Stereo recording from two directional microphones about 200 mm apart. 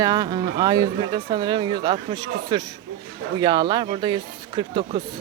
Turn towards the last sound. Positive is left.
turn(degrees=-25)  # may be behind; listen again after turning